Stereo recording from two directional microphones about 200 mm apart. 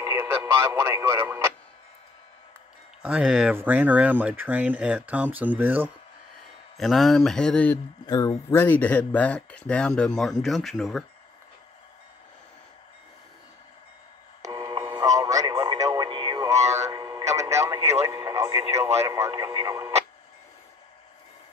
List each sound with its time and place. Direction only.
0.0 s speech: 15° right (ahead or behind)
3.0 s speech: 5° right (ahead or behind)
8.1 s speech: 20° left (ahead or behind); by 11.1 s centre (ahead or behind)
14.4 s radio: 20° right (ahead or behind)